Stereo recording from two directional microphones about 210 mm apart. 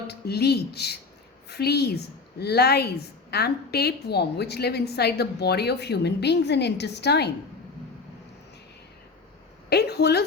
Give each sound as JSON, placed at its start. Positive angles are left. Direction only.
{"t": 0.1, "sound": "a woman's voice", "side_deg": 50}
{"t": 9.6, "sound": "a woman's voice", "side_deg": 50}